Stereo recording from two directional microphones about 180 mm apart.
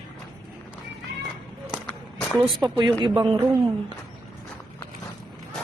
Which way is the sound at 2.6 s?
25° right (ahead or behind).